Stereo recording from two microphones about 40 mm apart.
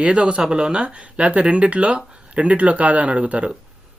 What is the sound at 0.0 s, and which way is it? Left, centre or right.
Speech, right.